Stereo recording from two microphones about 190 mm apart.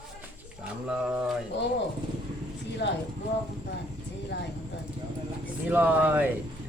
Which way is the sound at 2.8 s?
65° left (ahead or behind).